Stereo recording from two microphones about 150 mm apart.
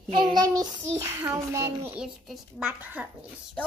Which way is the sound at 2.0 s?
5° right (ahead or behind).